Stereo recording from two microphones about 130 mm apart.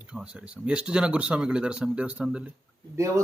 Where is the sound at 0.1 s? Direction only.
5° right (ahead or behind).